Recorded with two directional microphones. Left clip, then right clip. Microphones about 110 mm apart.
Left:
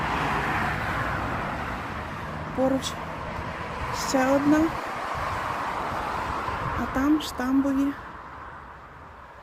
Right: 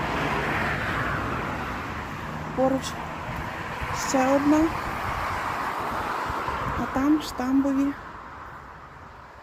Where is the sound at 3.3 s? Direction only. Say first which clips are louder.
Right 1 dB; 35° left (ahead or behind).